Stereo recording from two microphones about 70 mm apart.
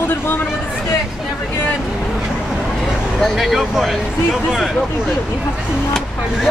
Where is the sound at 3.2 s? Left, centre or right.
Centre.